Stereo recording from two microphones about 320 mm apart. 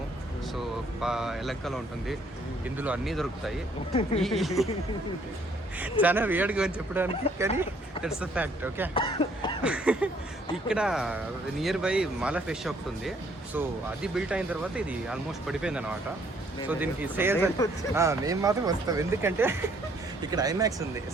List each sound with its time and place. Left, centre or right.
1.0 s speech: centre
5.8 s speech: centre
9.0 s cough: centre
9.6 s speech: centre
17.6 s speech: centre
17.9 s speech: centre